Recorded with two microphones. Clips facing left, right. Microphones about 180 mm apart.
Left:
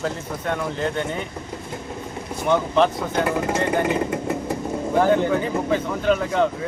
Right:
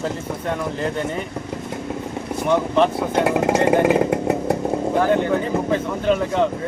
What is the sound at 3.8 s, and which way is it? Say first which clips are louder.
Motorcycle: right 5 dB; 65° right (ahead or behind).